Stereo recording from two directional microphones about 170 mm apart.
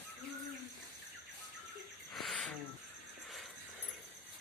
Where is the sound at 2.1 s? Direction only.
Centre (ahead or behind).